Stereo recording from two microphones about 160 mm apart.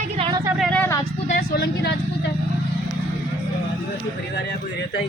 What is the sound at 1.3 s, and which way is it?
Speech, 70° left (ahead or behind).